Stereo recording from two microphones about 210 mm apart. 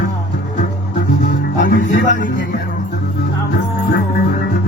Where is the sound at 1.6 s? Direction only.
40° left (ahead or behind).